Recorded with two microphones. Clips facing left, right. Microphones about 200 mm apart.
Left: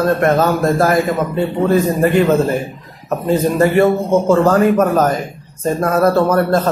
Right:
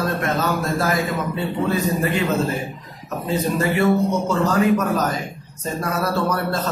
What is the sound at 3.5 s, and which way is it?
A man's voice, 50° left (ahead or behind).